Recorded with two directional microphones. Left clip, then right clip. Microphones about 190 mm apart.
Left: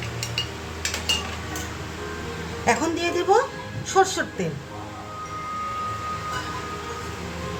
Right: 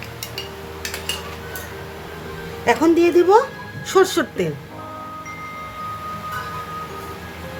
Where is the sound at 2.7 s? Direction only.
45° right (ahead or behind).